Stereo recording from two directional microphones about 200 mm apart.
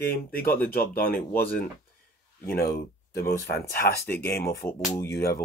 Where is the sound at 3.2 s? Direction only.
50° left (ahead or behind).